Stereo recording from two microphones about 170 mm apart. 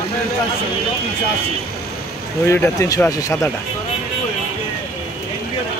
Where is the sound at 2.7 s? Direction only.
20° left (ahead or behind).